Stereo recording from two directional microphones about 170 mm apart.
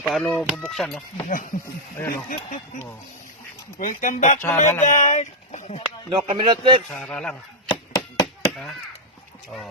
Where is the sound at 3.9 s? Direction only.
50° left (ahead or behind).